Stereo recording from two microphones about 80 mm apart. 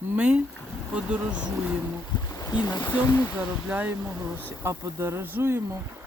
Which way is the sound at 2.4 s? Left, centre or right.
Left.